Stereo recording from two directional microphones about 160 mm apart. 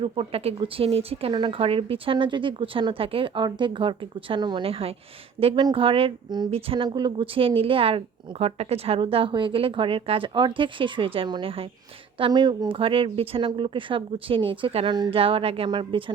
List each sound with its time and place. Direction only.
0.0 s speech: 35° right (ahead or behind)